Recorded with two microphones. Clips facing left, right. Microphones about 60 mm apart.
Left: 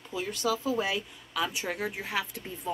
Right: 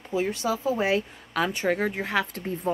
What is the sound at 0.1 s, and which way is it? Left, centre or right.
A woman's voice, right.